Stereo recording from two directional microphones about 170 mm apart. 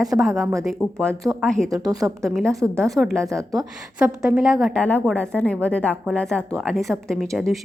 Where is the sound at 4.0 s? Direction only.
5° right (ahead or behind).